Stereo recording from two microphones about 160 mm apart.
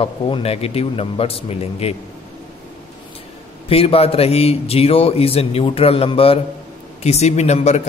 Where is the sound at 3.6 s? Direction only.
40° left (ahead or behind).